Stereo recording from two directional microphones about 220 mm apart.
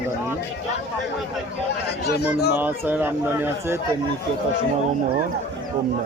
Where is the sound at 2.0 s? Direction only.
45° left (ahead or behind).